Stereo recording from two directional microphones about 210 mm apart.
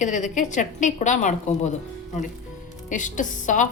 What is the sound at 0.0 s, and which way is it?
Speech, 35° left (ahead or behind).